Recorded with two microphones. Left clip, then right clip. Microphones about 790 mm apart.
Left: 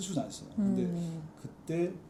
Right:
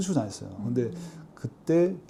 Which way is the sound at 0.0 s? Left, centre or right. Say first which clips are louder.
Right 7 dB; right.